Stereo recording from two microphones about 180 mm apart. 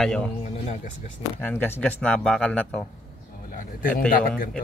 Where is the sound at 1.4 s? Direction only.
10° left (ahead or behind).